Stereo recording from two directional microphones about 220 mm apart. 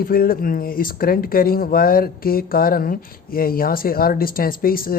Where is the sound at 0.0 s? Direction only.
40° left (ahead or behind).